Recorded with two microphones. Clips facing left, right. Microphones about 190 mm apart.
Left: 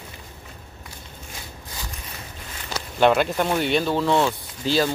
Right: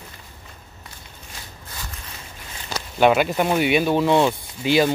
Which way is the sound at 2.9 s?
5° right (ahead or behind).